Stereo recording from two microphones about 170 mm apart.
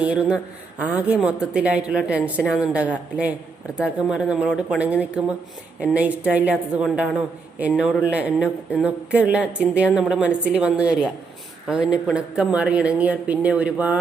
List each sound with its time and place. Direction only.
0.0 s speech: 5° right (ahead or behind)